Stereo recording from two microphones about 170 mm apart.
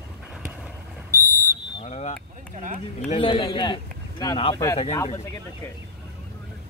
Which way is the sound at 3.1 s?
30° left (ahead or behind).